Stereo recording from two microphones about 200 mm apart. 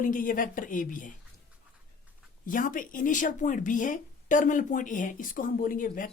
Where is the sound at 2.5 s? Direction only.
40° left (ahead or behind).